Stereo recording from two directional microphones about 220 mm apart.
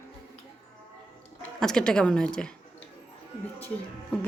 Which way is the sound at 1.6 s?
5° left (ahead or behind).